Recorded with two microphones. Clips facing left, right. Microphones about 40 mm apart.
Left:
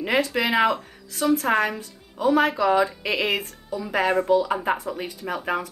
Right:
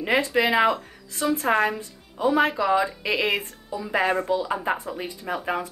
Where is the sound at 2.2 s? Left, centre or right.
Centre.